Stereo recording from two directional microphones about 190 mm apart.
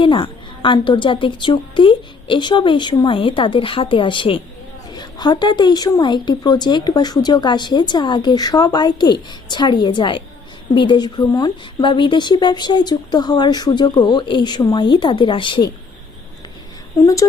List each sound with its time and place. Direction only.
0.0 s speech: 25° left (ahead or behind)